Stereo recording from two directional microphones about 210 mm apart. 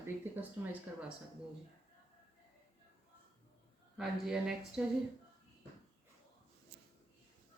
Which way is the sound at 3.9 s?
Centre (ahead or behind).